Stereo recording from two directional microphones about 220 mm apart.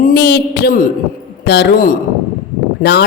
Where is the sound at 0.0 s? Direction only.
50° left (ahead or behind).